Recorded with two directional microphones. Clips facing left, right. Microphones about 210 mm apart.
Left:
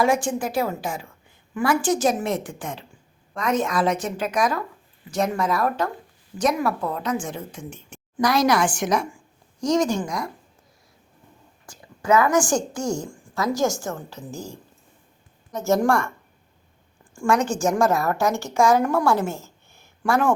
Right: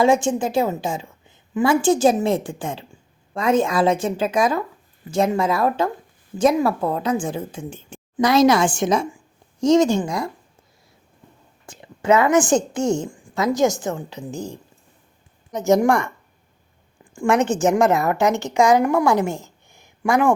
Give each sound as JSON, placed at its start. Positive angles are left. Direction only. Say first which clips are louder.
{"t": 0.0, "sound": "a woman's voice", "louder": "right 4 dB", "side_deg": -25}
{"t": 11.6, "sound": "a woman's voice", "louder": "right 5 dB", "side_deg": -25}
{"t": 17.2, "sound": "a woman's voice", "louder": "right 3 dB", "side_deg": -20}
{"t": 19.3, "sound": "a sound", "louder": "right 4 dB", "side_deg": -15}